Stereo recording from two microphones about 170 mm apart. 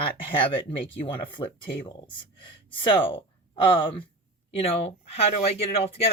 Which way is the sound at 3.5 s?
30° left (ahead or behind).